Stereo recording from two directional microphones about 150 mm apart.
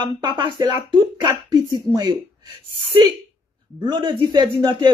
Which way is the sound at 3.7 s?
30° right (ahead or behind).